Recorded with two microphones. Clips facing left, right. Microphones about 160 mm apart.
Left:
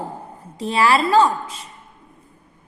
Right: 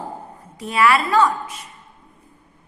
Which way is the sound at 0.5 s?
30° left (ahead or behind).